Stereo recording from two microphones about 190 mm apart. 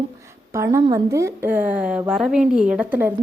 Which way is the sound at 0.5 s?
15° right (ahead or behind).